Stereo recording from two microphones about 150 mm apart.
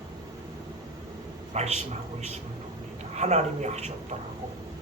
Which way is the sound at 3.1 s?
50° right (ahead or behind).